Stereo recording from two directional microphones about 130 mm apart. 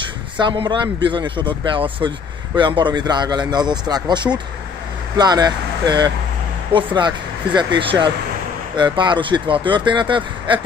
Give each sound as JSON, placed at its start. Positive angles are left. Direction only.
{"t": 0.4, "sound": "speech", "side_deg": -35}